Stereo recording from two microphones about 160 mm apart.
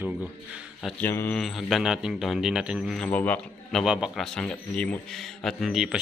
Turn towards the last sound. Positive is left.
turn(degrees=-5)  # may be behind; listen again after turning